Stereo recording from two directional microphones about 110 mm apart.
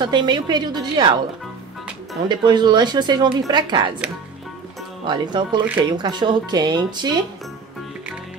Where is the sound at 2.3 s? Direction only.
45° right (ahead or behind).